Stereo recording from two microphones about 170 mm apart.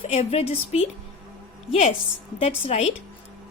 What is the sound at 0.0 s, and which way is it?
Speech, 35° left (ahead or behind).